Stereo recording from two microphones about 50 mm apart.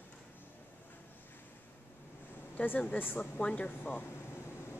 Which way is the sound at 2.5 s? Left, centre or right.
Left.